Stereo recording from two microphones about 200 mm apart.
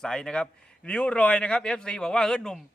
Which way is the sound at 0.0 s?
5° left (ahead or behind).